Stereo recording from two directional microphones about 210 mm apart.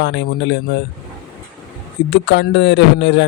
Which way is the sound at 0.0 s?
60° left (ahead or behind).